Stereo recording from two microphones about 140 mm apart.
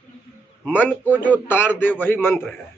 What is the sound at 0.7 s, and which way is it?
A man's voice, 10° left (ahead or behind).